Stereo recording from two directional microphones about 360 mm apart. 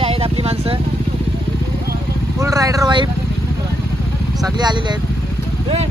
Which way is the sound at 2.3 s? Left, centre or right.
Centre.